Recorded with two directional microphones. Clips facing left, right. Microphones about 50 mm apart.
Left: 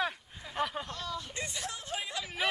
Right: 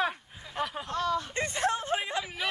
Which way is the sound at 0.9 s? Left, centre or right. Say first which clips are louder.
Right 9 dB; right.